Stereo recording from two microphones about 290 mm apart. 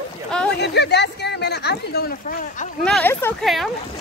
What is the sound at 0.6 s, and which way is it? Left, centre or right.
Speech, left.